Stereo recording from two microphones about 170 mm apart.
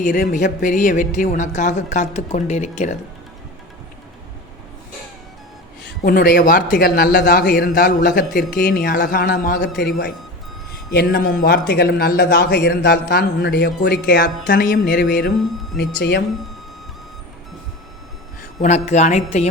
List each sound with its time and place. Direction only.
0.1 s speech: 50° left (ahead or behind)
5.8 s speech: 65° left (ahead or behind)
6.7 s speech: 75° left (ahead or behind); by 8.2 s 50° left (ahead or behind)
8.4 s speech: 65° left (ahead or behind)
10.9 s speech: 60° left (ahead or behind)
16.0 s speech: 75° left (ahead or behind)
18.6 s a woman's voice: 40° left (ahead or behind)